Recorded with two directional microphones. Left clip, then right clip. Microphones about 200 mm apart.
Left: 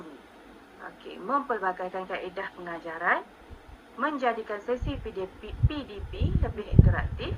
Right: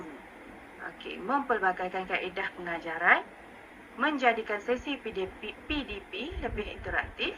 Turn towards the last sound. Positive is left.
turn(degrees=-35)  # may be behind; listen again after turning